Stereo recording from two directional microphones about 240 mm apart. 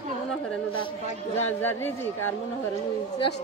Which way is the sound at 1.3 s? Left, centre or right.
Centre.